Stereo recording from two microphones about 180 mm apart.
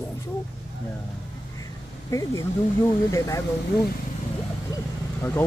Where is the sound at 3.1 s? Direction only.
20° left (ahead or behind).